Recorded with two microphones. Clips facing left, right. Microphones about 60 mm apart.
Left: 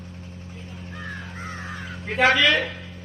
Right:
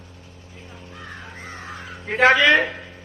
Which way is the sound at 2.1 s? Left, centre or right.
Right.